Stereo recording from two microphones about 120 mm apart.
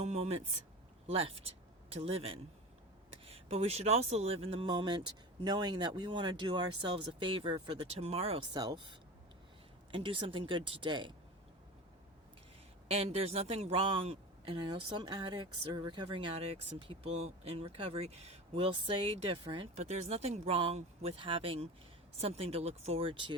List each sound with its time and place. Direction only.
0.0 s speech: 65° right (ahead or behind)
4.7 s speech: 40° right (ahead or behind)
8.0 s speech: 60° right (ahead or behind)
8.5 s a man's voice: 35° right (ahead or behind)
12.9 s a man's voice: 60° right (ahead or behind)
17.1 s a man's voice: 65° right (ahead or behind); by 23.3 s 45° right (ahead or behind)